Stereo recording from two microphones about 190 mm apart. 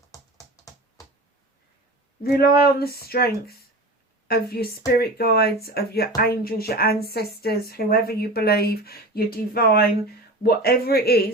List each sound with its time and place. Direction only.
0.1 s typing: 20° left (ahead or behind)
2.2 s speech: 55° left (ahead or behind)